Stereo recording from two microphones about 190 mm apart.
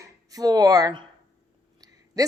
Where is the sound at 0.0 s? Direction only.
20° right (ahead or behind).